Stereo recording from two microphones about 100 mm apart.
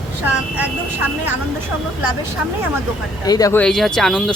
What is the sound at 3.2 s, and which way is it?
Speech, 40° left (ahead or behind).